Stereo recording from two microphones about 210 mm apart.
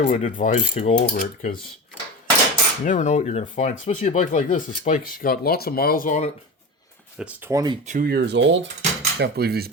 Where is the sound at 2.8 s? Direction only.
35° left (ahead or behind).